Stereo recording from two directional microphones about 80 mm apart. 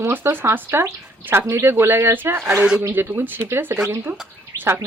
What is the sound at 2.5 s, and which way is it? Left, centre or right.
Speech, centre.